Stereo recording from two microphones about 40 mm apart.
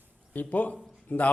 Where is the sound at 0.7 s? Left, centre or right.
Left.